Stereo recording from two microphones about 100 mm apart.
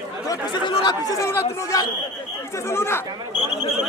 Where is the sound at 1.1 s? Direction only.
25° left (ahead or behind).